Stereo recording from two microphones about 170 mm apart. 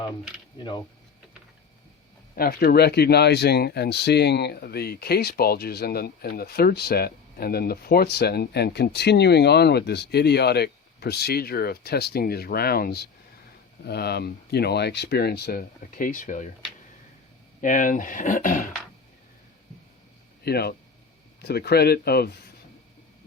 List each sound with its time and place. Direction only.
2.3 s speech: 60° left (ahead or behind)
17.6 s speech: 50° left (ahead or behind)
20.4 s speech: 70° left (ahead or behind)